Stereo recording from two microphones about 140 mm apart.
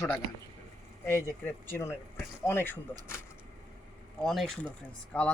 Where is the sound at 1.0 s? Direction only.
15° left (ahead or behind).